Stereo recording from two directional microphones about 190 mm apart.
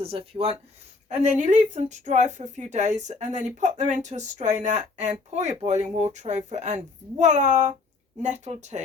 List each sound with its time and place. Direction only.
0.0 s speech: 30° right (ahead or behind)